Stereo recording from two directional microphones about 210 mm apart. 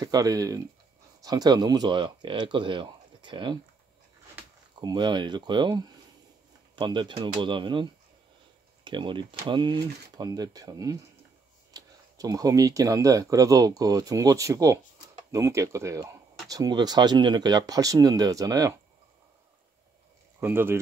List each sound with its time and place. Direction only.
0.0 s speech: 15° right (ahead or behind)
4.7 s speech: 20° right (ahead or behind)
20.3 s speech: 10° right (ahead or behind)